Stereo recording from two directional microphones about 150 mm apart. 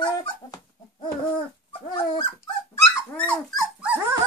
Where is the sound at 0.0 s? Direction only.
30° left (ahead or behind).